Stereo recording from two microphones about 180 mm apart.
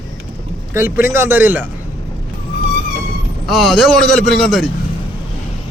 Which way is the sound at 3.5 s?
Centre (ahead or behind).